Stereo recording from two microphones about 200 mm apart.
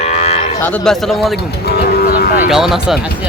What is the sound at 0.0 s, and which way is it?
Moo, 30° left (ahead or behind).